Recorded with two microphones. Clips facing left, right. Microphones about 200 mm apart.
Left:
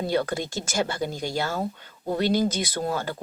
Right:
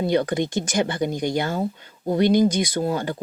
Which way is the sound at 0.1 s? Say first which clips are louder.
Right 5 dB; 15° right (ahead or behind).